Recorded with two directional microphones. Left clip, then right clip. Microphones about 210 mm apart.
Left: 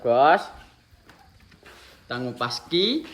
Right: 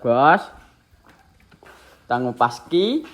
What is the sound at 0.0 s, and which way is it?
Speech, 25° right (ahead or behind).